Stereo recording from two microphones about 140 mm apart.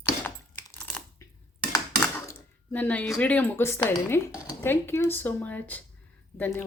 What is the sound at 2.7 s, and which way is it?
A woman's voice, 10° left (ahead or behind).